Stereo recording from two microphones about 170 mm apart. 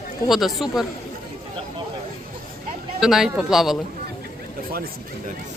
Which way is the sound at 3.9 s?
60° right (ahead or behind).